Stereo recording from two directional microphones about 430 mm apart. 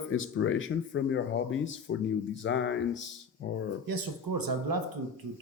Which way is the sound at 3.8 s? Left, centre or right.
Right.